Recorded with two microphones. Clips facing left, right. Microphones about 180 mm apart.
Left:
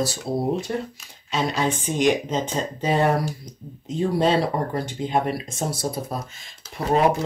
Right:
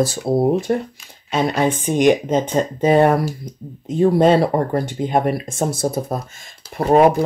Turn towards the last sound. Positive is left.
turn(degrees=-55)  # may be behind; listen again after turning